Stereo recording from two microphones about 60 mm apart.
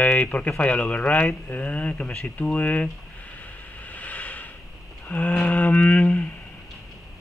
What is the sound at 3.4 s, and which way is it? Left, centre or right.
Vehicle, left.